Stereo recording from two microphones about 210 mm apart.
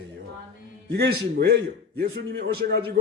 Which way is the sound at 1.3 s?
50° right (ahead or behind).